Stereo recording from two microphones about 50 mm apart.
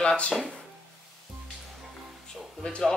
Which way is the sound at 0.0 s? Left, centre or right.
Centre.